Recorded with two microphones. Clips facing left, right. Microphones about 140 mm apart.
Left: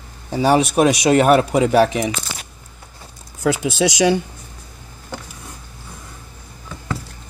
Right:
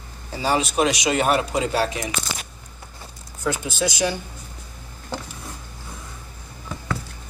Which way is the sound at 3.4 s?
90° left.